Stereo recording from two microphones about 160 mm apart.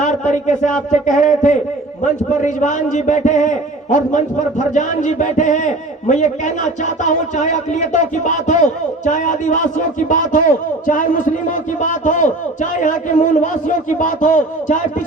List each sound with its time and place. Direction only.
0.0 s a man's voice: 50° left (ahead or behind)